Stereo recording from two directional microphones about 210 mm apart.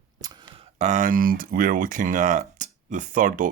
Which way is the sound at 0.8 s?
35° right (ahead or behind).